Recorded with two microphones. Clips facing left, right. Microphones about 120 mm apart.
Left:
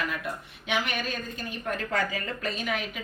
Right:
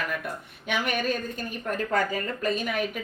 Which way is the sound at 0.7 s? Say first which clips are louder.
Right 3 dB; 50° right (ahead or behind).